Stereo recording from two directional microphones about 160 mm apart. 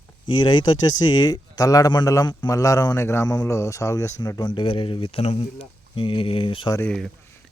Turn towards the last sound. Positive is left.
turn(degrees=5)  # may be behind; listen again after turning